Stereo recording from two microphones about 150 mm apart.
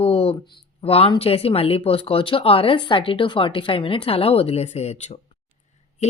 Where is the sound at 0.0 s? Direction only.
40° left (ahead or behind).